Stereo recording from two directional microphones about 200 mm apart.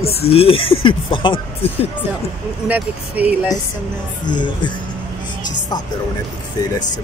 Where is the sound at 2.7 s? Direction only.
10° right (ahead or behind).